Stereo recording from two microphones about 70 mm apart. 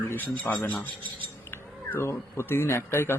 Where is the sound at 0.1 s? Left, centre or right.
Left.